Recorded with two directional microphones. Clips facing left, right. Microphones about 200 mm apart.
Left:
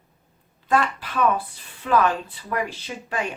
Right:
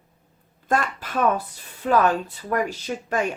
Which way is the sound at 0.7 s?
45° right (ahead or behind).